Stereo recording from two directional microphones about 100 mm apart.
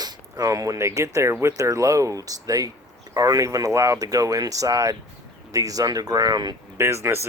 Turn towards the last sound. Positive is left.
turn(degrees=-25)  # may be behind; listen again after turning